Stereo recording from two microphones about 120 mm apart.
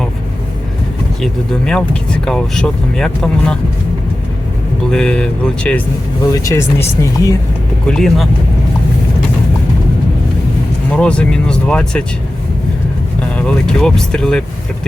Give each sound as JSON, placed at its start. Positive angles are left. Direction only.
{"t": 1.2, "sound": "speech", "side_deg": 5}
{"t": 4.9, "sound": "speech", "side_deg": 5}
{"t": 6.3, "sound": "speech", "side_deg": 25}
{"t": 7.9, "sound": "speech", "side_deg": 5}
{"t": 10.9, "sound": "speech", "side_deg": 10}
{"t": 13.3, "sound": "speech", "side_deg": 10}